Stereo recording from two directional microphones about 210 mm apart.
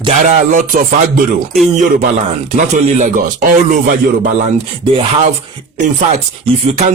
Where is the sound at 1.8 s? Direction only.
40° right (ahead or behind).